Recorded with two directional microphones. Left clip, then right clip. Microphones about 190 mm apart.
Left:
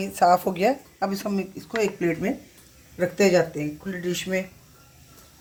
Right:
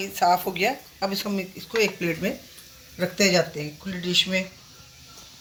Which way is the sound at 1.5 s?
30° left (ahead or behind).